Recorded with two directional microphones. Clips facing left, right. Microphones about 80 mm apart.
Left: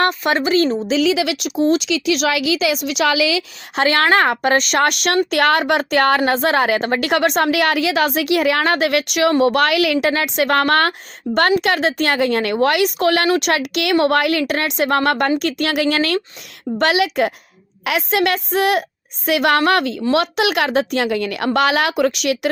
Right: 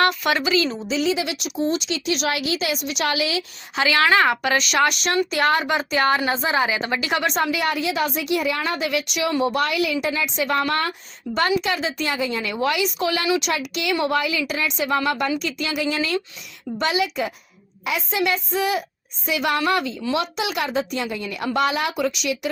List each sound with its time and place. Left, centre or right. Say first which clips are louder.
0.0 s speech: left 3 dB; left
0.9 s a woman's voice: left 6 dB; left
3.8 s a woman's voice: left 3 dB; left
9.4 s a woman's voice: left 6 dB; left
11.3 s a woman's voice: left 5 dB; left